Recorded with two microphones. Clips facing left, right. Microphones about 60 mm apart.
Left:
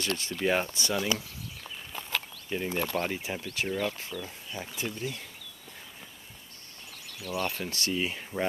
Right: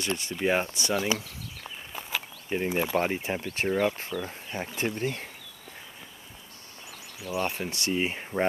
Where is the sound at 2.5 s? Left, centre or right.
Right.